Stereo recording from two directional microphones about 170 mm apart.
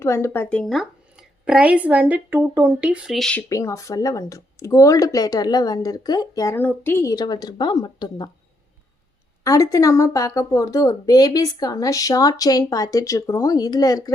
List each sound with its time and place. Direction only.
0.0 s a woman's voice: 15° left (ahead or behind)
0.6 s speech: centre (ahead or behind)
3.5 s speech: 20° left (ahead or behind)
9.4 s speech: 20° left (ahead or behind)